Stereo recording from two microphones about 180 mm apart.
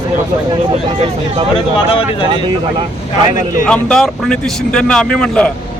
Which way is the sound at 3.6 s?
5° left (ahead or behind).